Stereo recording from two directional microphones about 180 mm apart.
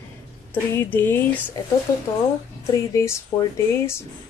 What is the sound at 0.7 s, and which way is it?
Speech, 10° left (ahead or behind).